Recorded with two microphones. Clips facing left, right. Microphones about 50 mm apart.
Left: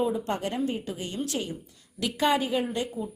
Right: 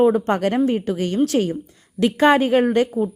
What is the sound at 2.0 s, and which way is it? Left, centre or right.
Speech, right.